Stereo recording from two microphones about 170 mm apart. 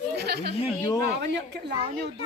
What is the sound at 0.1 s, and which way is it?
Snicker, 75° right (ahead or behind).